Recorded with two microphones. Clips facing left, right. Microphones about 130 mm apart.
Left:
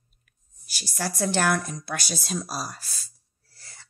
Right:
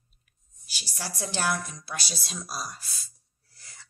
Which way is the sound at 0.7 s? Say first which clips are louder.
Left 7 dB; 45° left (ahead or behind).